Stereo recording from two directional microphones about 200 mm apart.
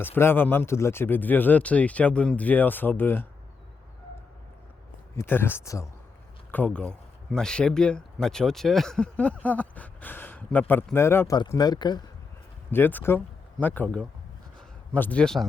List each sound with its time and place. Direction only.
0.0 s speech: 10° left (ahead or behind)
5.1 s speech: 10° left (ahead or behind)
12.7 s speech: 10° left (ahead or behind)